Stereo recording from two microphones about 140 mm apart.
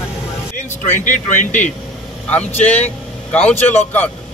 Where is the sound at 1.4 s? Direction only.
60° left (ahead or behind).